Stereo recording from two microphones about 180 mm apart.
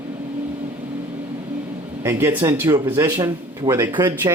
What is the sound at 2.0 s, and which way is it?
Speech, 15° right (ahead or behind).